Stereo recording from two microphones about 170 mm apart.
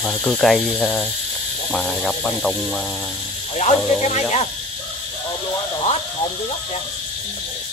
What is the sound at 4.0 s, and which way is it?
Speech, 40° left (ahead or behind).